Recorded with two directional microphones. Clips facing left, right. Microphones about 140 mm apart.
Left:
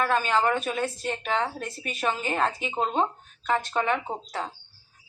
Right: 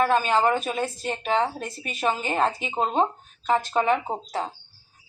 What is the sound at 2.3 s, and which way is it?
Speech, 35° right (ahead or behind).